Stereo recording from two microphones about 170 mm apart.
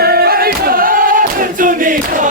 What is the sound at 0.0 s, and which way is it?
Choir, 65° right (ahead or behind).